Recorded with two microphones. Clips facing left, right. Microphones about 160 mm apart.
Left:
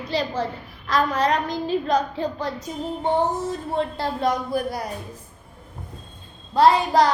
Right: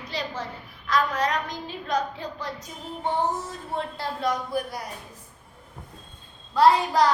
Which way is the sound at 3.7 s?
25° left (ahead or behind).